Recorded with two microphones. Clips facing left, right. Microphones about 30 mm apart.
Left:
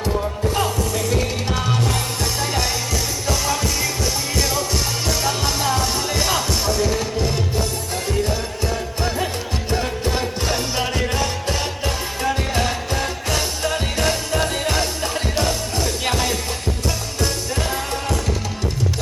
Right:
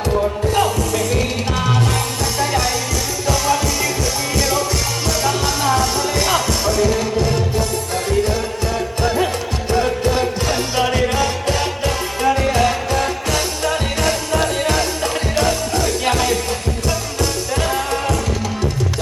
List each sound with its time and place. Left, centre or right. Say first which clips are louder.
0.5 s music: right 4 dB; centre
2.4 s music: right 6 dB; centre
4.4 s music: right 4 dB; centre
6.0 s music: right 3 dB; centre
9.0 s music: right 6 dB; centre
10.8 s music: right 5 dB; centre